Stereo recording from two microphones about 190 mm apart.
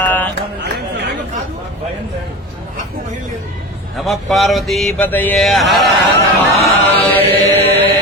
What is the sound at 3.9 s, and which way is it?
Mantra, centre (ahead or behind).